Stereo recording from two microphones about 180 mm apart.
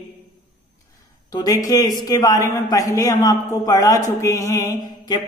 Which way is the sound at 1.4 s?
20° left (ahead or behind).